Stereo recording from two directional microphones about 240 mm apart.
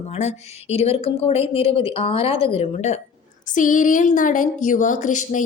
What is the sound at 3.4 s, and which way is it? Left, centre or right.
A woman's voice, left.